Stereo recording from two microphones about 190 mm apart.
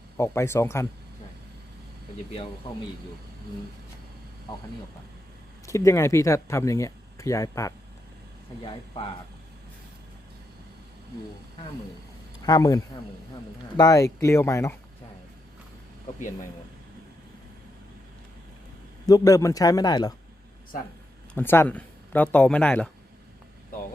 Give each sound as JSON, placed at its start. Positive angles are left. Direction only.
{"t": 0.2, "sound": "speech", "side_deg": 15}
{"t": 5.6, "sound": "speech", "side_deg": 15}
{"t": 12.5, "sound": "a man's voice", "side_deg": 20}
{"t": 19.0, "sound": "a man's voice", "side_deg": 20}
{"t": 21.3, "sound": "speech", "side_deg": 10}